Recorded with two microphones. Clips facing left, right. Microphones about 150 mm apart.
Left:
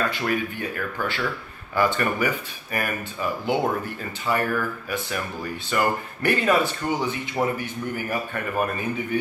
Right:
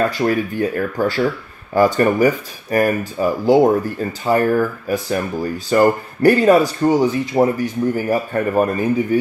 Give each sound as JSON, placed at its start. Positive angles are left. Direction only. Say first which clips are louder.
{"t": 0.2, "sound": "speech", "louder": "right 8 dB", "side_deg": -40}